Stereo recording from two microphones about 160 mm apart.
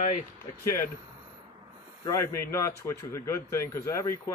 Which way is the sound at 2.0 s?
15° left (ahead or behind).